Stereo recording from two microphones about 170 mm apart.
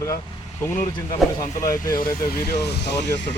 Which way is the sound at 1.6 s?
20° left (ahead or behind).